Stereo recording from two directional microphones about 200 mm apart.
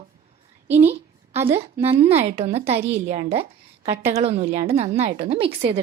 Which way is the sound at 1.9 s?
30° right (ahead or behind).